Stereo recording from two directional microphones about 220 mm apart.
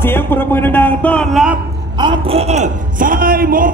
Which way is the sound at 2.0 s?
25° right (ahead or behind).